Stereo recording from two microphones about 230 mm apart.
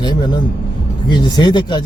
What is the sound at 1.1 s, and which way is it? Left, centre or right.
Speech, centre.